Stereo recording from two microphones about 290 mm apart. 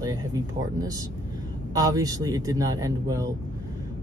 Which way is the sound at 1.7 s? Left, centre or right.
Centre.